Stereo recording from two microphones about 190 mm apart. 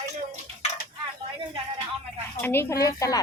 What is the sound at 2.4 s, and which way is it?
Speech, 15° left (ahead or behind).